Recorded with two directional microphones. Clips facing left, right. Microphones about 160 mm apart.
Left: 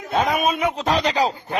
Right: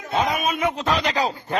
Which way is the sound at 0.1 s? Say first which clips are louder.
Left 2 dB; 55° left (ahead or behind).